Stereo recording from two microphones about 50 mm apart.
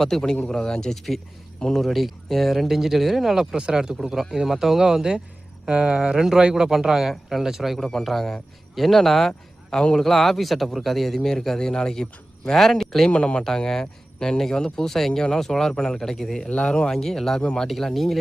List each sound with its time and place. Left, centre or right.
0.0 s a man's voice: centre
1.8 s speech: centre
7.8 s a man's voice: centre
9.6 s a man's voice: centre
13.1 s a man's voice: left
13.4 s a man's voice: centre
16.5 s a man's voice: left
16.9 s a man's voice: centre
17.7 s speech: centre